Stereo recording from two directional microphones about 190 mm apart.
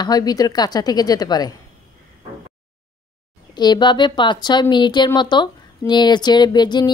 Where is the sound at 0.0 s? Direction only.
20° left (ahead or behind).